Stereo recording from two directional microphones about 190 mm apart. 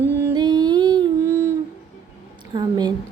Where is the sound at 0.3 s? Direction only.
20° right (ahead or behind).